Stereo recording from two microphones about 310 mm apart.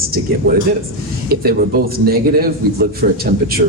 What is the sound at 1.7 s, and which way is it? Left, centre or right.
A man's voice, right.